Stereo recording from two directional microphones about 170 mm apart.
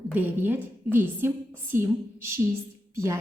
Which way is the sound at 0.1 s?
10° right (ahead or behind).